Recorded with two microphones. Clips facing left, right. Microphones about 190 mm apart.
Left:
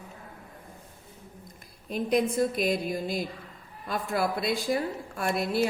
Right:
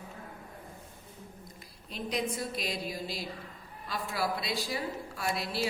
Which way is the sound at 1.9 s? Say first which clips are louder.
Left 8 dB; 50° left (ahead or behind).